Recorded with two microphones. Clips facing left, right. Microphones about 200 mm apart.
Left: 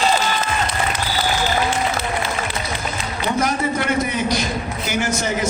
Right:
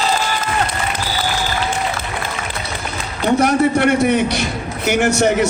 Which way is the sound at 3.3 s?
65° right (ahead or behind).